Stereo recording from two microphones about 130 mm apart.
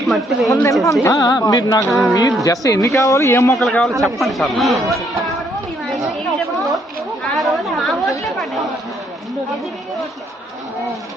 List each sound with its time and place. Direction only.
0.1 s speech: centre (ahead or behind)
0.5 s music: 25° left (ahead or behind)
1.9 s speech: centre (ahead or behind)
2.4 s music: 25° left (ahead or behind)
3.6 s a man's voice: 5° left (ahead or behind)
7.3 s chatter: centre (ahead or behind)